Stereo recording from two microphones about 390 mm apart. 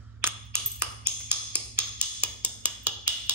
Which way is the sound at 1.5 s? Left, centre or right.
Centre.